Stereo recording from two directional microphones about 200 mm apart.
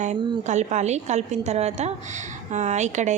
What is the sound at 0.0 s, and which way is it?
A woman's voice, 35° right (ahead or behind).